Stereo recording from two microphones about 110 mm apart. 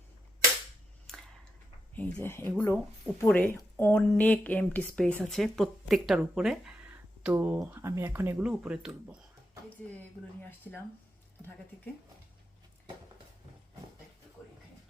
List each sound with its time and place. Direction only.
2.0 s speech: 15° left (ahead or behind); by 6.7 s 5° right (ahead or behind)
7.3 s speech: 20° right (ahead or behind)
8.4 s speech: 10° right (ahead or behind)